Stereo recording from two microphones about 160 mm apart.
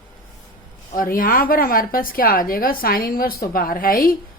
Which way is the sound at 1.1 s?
65° left (ahead or behind).